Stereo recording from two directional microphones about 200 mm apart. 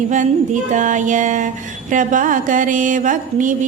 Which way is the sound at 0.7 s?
40° right (ahead or behind).